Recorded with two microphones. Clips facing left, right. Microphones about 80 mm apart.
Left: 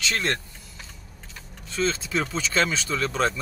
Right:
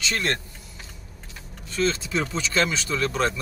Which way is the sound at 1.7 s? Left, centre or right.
Centre.